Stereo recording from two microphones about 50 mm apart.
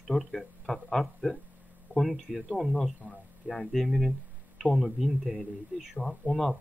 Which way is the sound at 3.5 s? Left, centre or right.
Centre.